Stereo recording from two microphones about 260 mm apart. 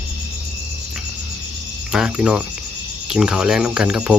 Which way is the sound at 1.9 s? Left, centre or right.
Centre.